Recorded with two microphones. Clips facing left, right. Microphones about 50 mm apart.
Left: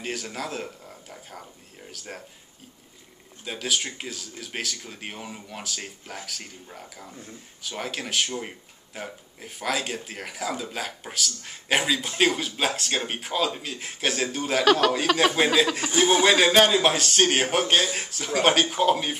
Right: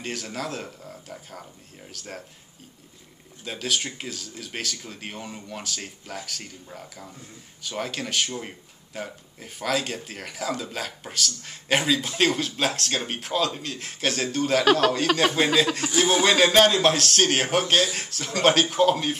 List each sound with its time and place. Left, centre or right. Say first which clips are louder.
0.0 s speech: even; centre
3.4 s speech: even; centre